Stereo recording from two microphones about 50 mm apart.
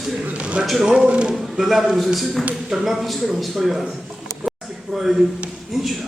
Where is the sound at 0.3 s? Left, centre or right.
Right.